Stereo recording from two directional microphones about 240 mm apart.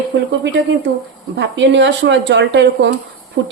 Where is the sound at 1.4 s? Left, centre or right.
Right.